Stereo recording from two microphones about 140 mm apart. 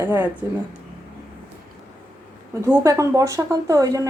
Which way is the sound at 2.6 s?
20° right (ahead or behind).